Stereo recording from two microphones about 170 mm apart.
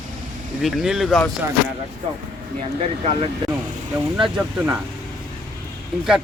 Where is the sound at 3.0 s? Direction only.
40° right (ahead or behind).